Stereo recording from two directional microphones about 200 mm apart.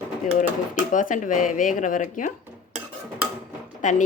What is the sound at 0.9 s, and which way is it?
Speech, 40° left (ahead or behind).